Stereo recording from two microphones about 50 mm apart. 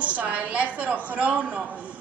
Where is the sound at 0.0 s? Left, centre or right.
Right.